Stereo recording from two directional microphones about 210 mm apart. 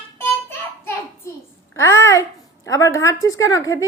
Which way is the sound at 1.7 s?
15° left (ahead or behind).